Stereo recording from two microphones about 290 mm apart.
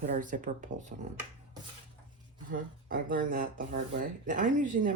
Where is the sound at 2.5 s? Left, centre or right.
Right.